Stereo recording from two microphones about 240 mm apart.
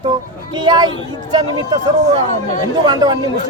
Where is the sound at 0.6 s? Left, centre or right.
Centre.